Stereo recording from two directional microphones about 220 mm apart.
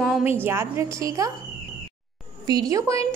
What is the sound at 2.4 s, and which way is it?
Speech, 15° right (ahead or behind).